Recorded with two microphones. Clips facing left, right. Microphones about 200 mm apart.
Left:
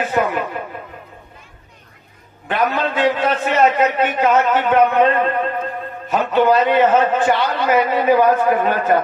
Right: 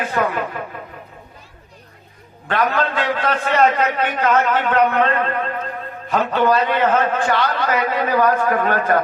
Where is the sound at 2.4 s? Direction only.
15° left (ahead or behind).